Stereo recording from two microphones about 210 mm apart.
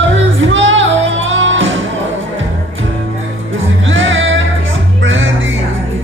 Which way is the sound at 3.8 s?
65° right (ahead or behind).